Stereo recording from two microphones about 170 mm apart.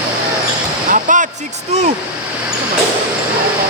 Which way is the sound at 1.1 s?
50° right (ahead or behind).